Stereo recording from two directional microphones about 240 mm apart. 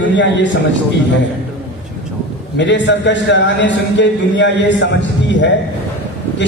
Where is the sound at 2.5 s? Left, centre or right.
Left.